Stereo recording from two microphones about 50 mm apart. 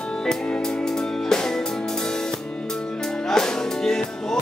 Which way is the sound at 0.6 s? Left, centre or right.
Centre.